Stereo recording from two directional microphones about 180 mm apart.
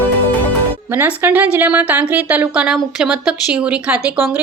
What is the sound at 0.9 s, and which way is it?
Speech, 10° right (ahead or behind).